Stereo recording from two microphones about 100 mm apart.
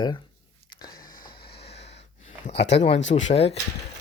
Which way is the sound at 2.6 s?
90° left.